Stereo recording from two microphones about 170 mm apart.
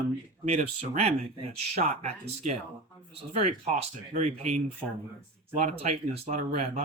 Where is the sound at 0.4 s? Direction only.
40° right (ahead or behind).